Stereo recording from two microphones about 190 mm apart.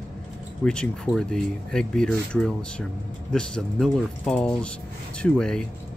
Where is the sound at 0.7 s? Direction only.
5° left (ahead or behind).